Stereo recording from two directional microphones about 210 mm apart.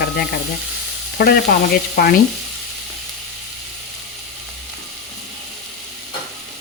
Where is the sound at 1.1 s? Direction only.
50° left (ahead or behind).